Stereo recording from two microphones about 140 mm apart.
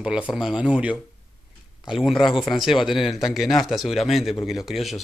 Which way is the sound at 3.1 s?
Centre (ahead or behind).